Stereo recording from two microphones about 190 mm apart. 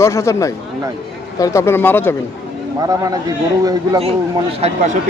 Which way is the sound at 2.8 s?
20° right (ahead or behind).